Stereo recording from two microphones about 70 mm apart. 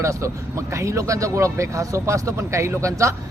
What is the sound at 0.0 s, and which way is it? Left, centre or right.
Speech, right.